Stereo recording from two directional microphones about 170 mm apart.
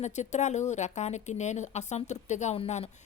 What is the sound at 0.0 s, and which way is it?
Speech, 45° left (ahead or behind).